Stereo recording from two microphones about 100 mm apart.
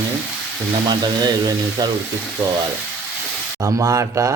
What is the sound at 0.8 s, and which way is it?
A man's voice, 45° right (ahead or behind).